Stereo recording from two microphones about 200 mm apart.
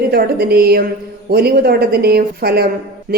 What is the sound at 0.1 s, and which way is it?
Speech, 50° right (ahead or behind).